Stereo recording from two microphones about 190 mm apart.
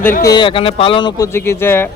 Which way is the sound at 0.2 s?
20° left (ahead or behind).